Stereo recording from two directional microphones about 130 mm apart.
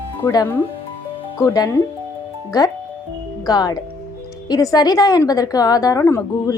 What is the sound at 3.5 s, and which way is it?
A woman's voice, 30° left (ahead or behind).